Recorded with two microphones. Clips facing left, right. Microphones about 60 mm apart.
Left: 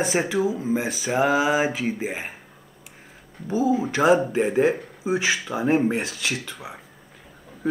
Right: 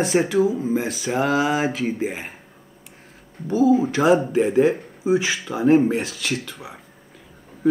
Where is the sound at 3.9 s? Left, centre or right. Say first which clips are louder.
Right 1 dB; centre.